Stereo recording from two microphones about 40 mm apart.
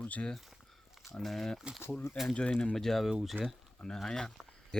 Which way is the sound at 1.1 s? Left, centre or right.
Centre.